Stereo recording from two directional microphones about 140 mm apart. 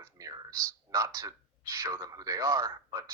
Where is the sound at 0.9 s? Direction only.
25° right (ahead or behind).